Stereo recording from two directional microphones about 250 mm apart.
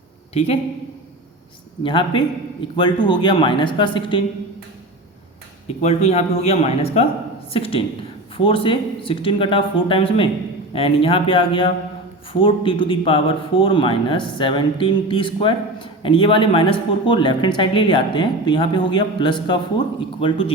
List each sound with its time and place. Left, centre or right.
0.3 s speech: left
1.8 s speech: left
5.6 s speech: left